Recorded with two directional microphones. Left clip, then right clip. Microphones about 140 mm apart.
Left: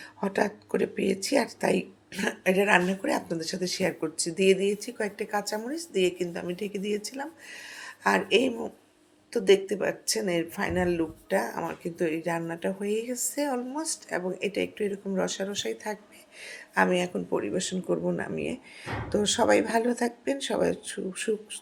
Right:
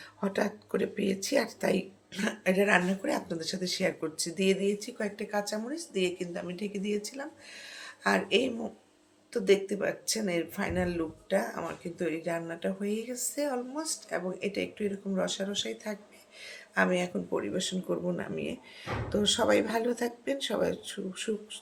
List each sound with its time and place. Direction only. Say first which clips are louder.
0.2 s speech: left 4 dB; 25° left (ahead or behind)